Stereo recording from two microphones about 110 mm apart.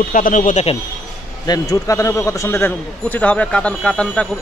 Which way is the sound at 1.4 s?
35° left (ahead or behind).